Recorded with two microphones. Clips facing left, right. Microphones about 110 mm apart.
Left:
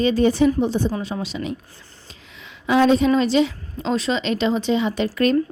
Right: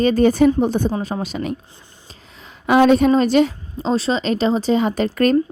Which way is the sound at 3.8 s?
35° right (ahead or behind).